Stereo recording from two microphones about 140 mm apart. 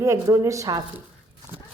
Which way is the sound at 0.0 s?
25° right (ahead or behind).